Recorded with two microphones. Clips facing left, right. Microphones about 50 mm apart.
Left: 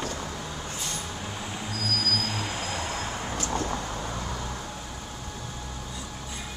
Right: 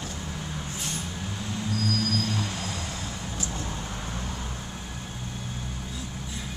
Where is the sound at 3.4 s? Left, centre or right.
Left.